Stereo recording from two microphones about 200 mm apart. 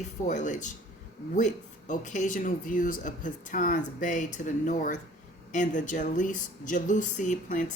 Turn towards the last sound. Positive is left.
turn(degrees=40)  # may be behind; listen again after turning